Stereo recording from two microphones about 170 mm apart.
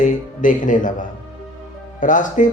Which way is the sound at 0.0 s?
50° left (ahead or behind).